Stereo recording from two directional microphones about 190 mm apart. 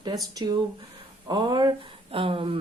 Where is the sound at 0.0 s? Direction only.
20° right (ahead or behind).